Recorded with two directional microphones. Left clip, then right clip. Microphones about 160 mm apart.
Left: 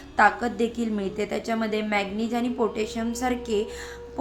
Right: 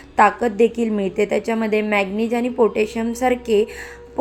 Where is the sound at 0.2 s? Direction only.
20° right (ahead or behind).